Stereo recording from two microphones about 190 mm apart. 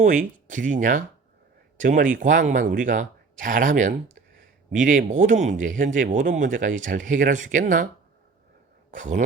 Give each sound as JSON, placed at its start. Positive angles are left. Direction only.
{"t": 0.0, "sound": "speech", "side_deg": -45}
{"t": 8.9, "sound": "speech", "side_deg": -40}